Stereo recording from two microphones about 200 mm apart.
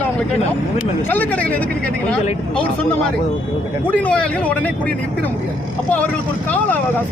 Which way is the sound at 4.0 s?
5° left (ahead or behind).